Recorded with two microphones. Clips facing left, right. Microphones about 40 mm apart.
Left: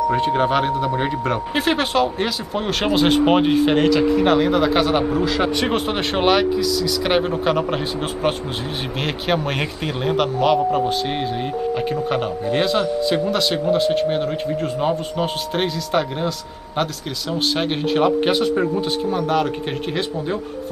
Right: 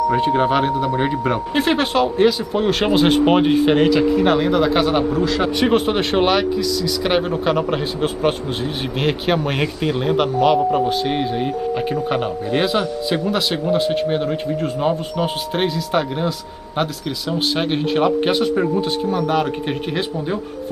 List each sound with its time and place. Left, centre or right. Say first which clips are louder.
0.1 s speech: right 1 dB; centre